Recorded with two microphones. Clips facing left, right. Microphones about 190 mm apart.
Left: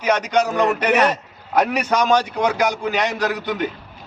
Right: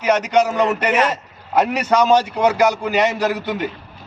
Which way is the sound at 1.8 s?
10° right (ahead or behind).